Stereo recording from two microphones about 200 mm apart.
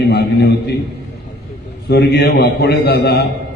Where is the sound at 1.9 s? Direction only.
55° left (ahead or behind).